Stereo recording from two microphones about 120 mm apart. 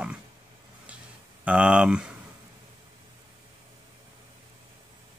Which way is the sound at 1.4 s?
10° right (ahead or behind).